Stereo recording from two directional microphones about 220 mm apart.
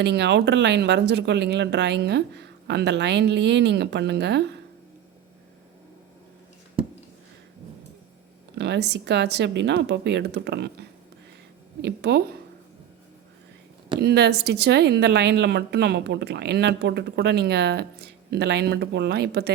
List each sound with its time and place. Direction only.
0.0 s speech: 50° right (ahead or behind)
8.5 s speech: 50° right (ahead or behind)
14.0 s speech: 45° right (ahead or behind)